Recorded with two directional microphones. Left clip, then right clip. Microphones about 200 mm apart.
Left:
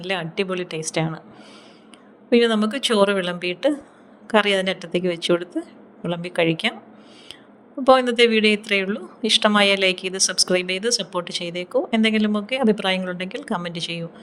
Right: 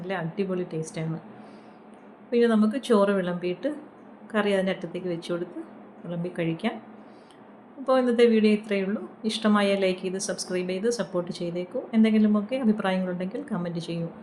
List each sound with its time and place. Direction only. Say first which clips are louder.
0.0 s speech: left 6 dB; 55° left (ahead or behind)
2.3 s speech: left 5 dB; 50° left (ahead or behind)
7.9 s speech: left 5 dB; 50° left (ahead or behind)